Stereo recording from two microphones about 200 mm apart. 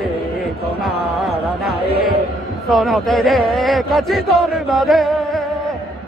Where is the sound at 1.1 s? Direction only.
Centre (ahead or behind).